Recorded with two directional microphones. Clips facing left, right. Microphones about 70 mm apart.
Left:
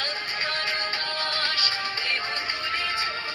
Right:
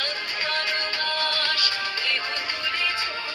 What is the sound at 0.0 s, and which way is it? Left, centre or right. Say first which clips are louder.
Music: right 1 dB; left.